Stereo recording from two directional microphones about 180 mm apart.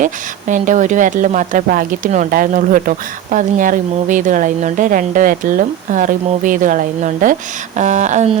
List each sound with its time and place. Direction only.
0.0 s speech: 45° right (ahead or behind)